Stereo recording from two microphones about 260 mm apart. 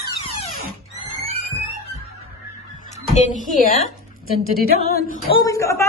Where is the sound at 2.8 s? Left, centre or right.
Left.